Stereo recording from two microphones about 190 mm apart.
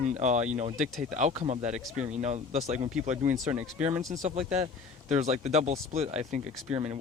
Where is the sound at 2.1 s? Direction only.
40° right (ahead or behind).